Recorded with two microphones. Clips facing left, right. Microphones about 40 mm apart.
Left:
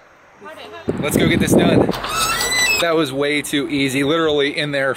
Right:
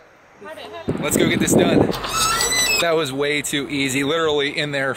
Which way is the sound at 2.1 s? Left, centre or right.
Centre.